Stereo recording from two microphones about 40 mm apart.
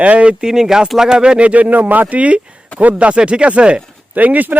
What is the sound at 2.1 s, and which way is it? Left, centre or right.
Speech, right.